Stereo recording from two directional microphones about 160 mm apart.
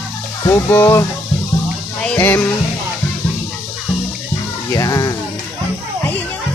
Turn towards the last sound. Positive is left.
turn(degrees=20)  # may be behind; listen again after turning